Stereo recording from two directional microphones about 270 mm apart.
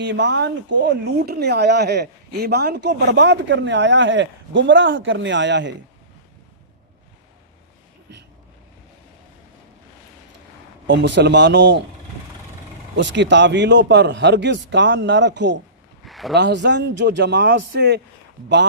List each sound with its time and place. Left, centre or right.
0.0 s speech: right
10.8 s speech: right
13.0 s speech: right
16.0 s a sound: centre
16.3 s speech: right